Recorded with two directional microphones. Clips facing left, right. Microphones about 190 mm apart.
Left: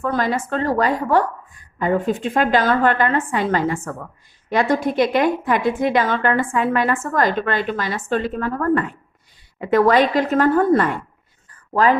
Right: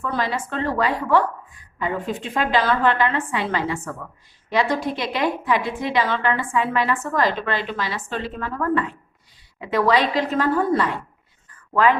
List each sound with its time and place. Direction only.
0.0 s a woman's voice: 45° left (ahead or behind)
11.7 s speech: 35° left (ahead or behind)